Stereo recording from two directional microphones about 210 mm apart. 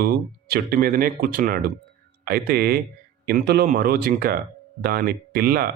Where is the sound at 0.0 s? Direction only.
45° right (ahead or behind).